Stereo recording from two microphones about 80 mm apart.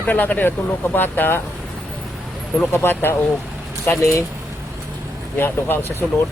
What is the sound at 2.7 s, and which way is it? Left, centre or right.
Speech, left.